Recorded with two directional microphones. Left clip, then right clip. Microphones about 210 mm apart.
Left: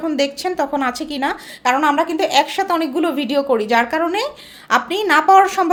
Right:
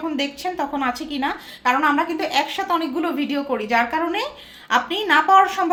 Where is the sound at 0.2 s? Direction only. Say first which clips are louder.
Left 7 dB; 55° left (ahead or behind).